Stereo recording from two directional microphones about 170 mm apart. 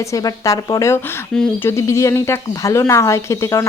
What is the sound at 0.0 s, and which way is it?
A woman's voice, 20° left (ahead or behind).